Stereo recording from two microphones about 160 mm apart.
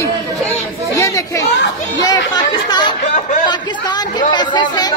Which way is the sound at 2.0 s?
25° left (ahead or behind).